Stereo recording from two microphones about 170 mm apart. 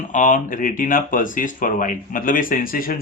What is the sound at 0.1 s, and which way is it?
Speech, 50° left (ahead or behind).